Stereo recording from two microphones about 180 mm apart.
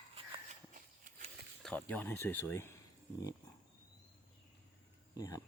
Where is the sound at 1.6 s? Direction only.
10° left (ahead or behind).